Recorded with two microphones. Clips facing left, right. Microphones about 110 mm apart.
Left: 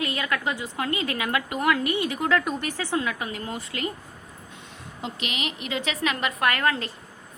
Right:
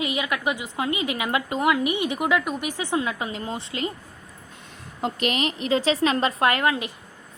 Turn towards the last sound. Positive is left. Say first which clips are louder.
# right 2 dB
turn(degrees=-15)  # may be behind; listen again after turning